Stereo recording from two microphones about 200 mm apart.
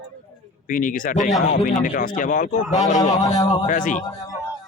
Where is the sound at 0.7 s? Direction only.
40° left (ahead or behind).